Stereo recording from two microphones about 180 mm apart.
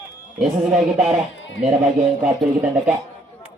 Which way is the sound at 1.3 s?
90° left.